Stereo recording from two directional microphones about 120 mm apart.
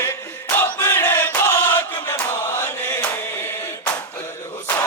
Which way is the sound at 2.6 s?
15° left (ahead or behind).